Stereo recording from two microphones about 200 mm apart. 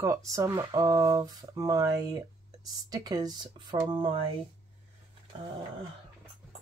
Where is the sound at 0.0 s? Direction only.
15° right (ahead or behind).